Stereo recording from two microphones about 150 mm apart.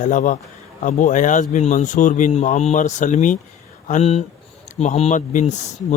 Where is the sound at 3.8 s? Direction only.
45° left (ahead or behind).